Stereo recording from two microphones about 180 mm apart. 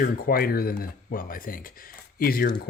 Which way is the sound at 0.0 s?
55° left (ahead or behind).